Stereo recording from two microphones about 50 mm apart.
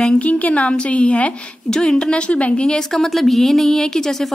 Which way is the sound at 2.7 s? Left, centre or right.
Centre.